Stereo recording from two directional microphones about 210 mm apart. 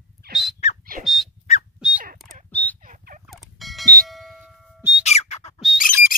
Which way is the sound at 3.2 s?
Centre (ahead or behind).